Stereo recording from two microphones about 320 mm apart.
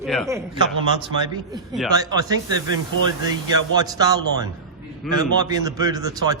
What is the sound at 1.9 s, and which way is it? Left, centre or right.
Speech, centre.